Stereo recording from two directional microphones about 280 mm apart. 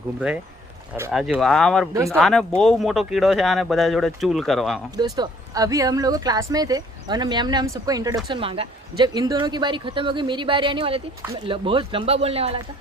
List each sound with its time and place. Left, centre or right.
0.9 s speech: centre
4.9 s speech: centre